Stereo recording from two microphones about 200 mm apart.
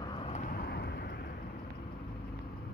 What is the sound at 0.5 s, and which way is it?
Vehicle, 50° left (ahead or behind).